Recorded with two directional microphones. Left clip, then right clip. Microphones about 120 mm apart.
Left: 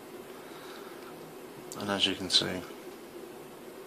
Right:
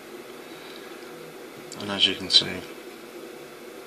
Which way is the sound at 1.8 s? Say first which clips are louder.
Right 6 dB; 15° left (ahead or behind).